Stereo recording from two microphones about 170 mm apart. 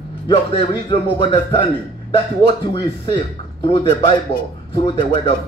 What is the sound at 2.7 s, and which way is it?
A man's voice, 30° left (ahead or behind).